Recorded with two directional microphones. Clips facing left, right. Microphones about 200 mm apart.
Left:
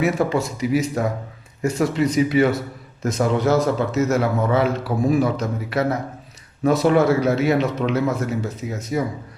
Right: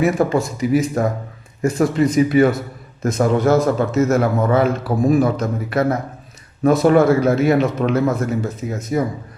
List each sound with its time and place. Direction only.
0.0 s a man's voice: 50° right (ahead or behind)